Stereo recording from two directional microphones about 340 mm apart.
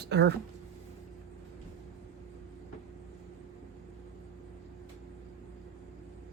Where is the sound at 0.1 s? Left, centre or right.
Right.